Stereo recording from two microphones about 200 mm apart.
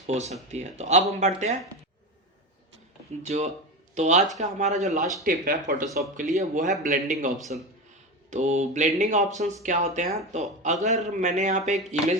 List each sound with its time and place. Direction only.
0.1 s a man's voice: 35° right (ahead or behind)
3.2 s a man's voice: 35° right (ahead or behind)